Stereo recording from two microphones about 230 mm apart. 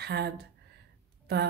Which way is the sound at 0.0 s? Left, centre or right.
Right.